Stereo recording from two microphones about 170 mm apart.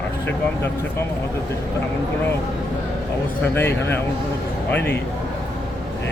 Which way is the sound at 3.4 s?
15° left (ahead or behind).